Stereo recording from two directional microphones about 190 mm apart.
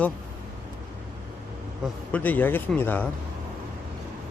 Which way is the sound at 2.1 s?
10° left (ahead or behind).